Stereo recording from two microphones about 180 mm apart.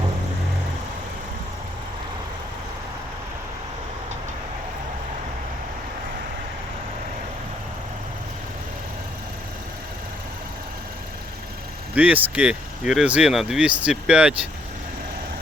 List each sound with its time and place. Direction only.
11.9 s speech: 10° right (ahead or behind)